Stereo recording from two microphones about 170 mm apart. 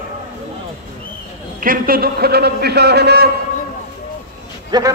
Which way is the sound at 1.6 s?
55° right (ahead or behind).